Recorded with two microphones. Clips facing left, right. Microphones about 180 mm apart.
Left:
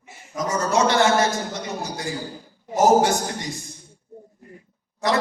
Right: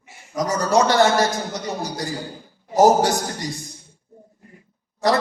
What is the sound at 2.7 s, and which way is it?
Speech, 35° right (ahead or behind).